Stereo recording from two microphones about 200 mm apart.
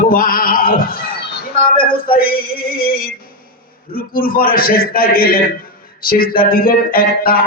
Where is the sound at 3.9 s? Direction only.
45° left (ahead or behind).